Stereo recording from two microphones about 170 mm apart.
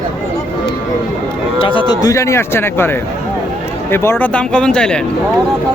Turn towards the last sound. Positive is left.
turn(degrees=5)  # may be behind; listen again after turning